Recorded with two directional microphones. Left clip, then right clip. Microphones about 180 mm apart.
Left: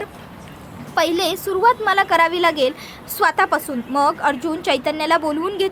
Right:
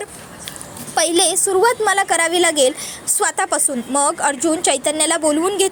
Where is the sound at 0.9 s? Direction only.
20° right (ahead or behind).